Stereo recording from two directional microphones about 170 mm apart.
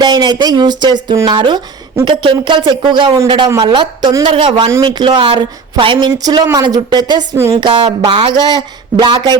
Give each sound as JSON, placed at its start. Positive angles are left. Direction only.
{"t": 0.0, "sound": "a man's voice", "side_deg": -25}